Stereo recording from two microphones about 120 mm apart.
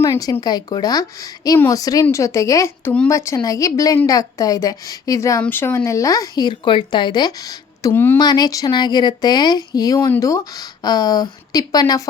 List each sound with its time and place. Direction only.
0.0 s speech: 30° left (ahead or behind)
7.9 s speech: 15° left (ahead or behind)
8.2 s speech: 35° left (ahead or behind)